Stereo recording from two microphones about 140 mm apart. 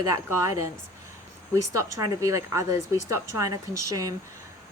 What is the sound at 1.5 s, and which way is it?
A woman's voice, 20° right (ahead or behind).